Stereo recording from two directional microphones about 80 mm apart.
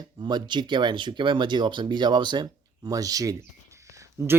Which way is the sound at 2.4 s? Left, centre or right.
Right.